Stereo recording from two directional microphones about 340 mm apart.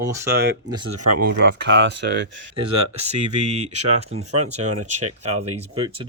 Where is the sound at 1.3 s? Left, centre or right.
Right.